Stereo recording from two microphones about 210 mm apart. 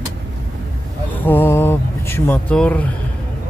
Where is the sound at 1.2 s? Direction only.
10° left (ahead or behind).